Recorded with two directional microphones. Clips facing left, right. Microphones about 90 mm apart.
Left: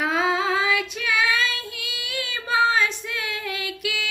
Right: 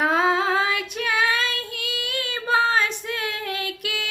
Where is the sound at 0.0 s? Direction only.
40° right (ahead or behind).